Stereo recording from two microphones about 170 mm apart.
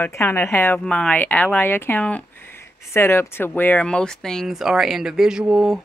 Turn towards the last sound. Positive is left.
turn(degrees=-5)  # may be behind; listen again after turning